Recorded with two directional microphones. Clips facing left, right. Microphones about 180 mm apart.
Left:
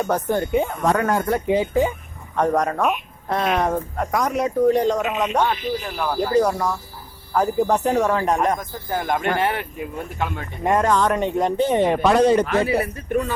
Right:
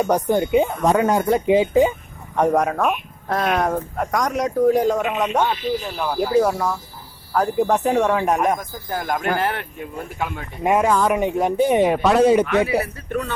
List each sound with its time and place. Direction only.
0.0 s speech: 15° right (ahead or behind)
12.5 s speech: 35° left (ahead or behind)
13.1 s speech: 5° left (ahead or behind)